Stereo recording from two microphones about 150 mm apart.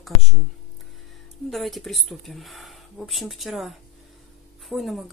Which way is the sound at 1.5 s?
Centre (ahead or behind).